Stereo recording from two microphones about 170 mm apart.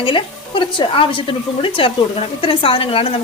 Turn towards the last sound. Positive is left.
turn(degrees=35)  # may be behind; listen again after turning